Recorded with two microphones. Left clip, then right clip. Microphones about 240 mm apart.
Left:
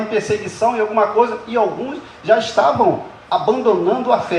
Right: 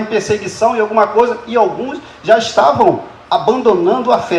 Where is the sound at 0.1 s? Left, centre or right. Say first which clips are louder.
Right 5 dB; right.